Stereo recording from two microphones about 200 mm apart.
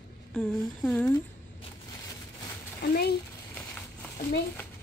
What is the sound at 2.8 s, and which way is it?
Speech, 50° left (ahead or behind).